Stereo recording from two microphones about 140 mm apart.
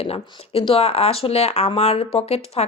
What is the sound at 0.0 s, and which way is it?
Speech, 45° left (ahead or behind).